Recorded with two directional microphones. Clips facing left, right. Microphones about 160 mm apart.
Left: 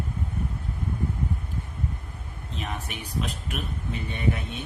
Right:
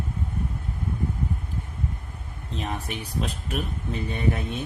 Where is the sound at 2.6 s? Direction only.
35° right (ahead or behind).